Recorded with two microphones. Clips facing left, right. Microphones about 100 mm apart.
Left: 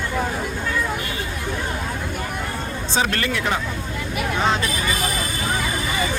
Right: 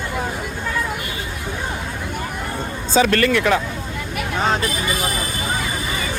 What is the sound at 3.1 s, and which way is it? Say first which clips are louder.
Speech: right 6 dB; 65° right (ahead or behind).